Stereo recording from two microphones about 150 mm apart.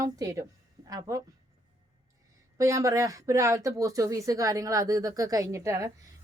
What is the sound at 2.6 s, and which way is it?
Speech, 20° right (ahead or behind).